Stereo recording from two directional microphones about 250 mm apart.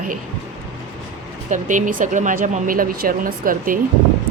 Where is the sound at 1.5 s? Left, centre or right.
Right.